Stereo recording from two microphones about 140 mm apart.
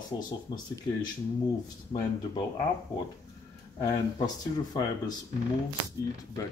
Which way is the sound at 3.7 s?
25° left (ahead or behind).